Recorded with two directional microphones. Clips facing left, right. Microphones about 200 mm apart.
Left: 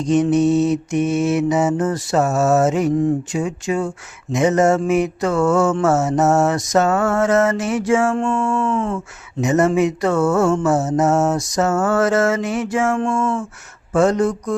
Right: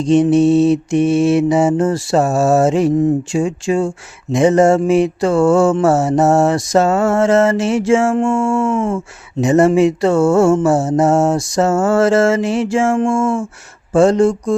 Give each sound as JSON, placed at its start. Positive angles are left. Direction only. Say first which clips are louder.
{"t": 0.0, "sound": "speech", "louder": "right 4 dB", "side_deg": -30}